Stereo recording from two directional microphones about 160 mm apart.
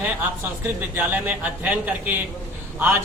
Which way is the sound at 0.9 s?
10° right (ahead or behind).